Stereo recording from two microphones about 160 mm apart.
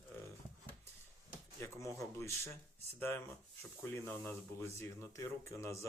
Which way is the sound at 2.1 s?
15° left (ahead or behind).